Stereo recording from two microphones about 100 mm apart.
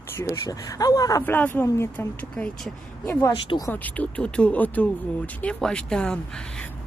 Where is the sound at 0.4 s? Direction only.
35° left (ahead or behind).